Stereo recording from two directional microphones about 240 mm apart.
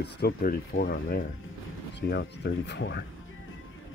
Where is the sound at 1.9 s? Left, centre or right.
Left.